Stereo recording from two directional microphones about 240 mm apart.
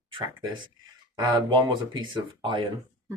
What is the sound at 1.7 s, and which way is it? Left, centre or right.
Speech, centre.